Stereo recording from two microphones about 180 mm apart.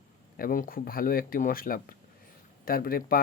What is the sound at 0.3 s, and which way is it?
Speech, 50° left (ahead or behind).